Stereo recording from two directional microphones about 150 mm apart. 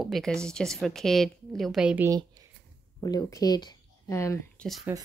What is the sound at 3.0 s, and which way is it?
Speech, 25° left (ahead or behind).